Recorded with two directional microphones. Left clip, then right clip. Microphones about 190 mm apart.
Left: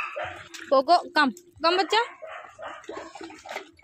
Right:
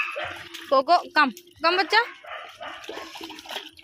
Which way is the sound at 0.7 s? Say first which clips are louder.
Right 1 dB; 25° left (ahead or behind).